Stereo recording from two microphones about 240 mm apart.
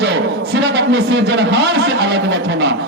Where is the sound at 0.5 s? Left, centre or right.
Right.